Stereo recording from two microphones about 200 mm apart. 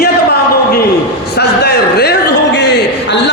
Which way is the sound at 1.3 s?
55° left (ahead or behind).